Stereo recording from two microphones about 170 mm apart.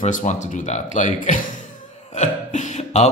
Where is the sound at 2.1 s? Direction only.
45° left (ahead or behind).